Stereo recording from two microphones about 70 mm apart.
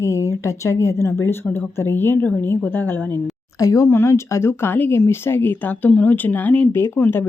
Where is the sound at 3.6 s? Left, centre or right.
Left.